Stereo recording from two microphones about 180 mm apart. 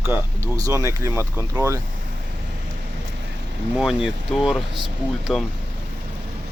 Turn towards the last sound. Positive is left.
turn(degrees=0)  # may be behind; listen again after turning